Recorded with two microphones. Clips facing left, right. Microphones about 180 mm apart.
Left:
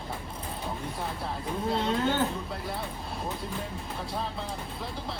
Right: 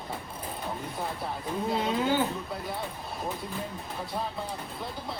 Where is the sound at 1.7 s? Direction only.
5° right (ahead or behind).